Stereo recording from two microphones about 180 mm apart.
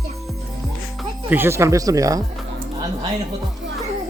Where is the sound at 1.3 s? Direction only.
15° right (ahead or behind).